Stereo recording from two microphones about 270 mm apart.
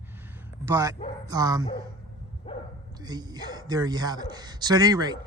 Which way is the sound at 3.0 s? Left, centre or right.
Centre.